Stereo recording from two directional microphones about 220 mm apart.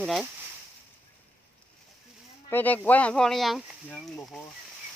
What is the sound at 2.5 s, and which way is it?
Speech, 10° left (ahead or behind).